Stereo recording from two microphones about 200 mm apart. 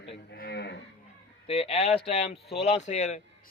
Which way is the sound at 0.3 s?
55° left (ahead or behind).